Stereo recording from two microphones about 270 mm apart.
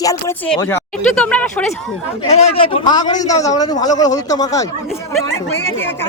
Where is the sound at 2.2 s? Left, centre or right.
Left.